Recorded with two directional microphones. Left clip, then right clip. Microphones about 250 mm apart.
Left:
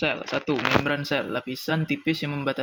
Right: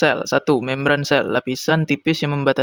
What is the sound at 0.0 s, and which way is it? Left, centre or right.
Speech, right.